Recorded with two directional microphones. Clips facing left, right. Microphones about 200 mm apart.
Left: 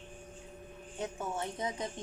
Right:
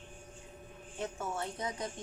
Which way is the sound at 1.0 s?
20° left (ahead or behind).